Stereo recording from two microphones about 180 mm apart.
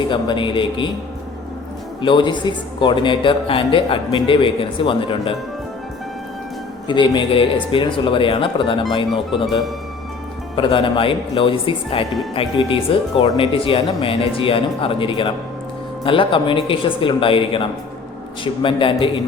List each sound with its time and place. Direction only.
0.1 s a man's voice: 25° left (ahead or behind)
2.0 s a man's voice: 25° left (ahead or behind)
6.8 s a man's voice: 25° left (ahead or behind)
10.5 s a man's voice: 30° left (ahead or behind)